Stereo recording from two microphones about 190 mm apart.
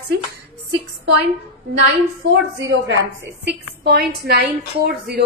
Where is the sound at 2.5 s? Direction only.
70° right (ahead or behind).